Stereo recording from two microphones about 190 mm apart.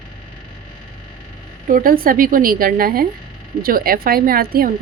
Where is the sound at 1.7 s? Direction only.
45° right (ahead or behind).